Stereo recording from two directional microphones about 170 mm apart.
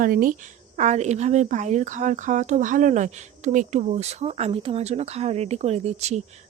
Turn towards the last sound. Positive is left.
turn(degrees=-40)  # may be behind; listen again after turning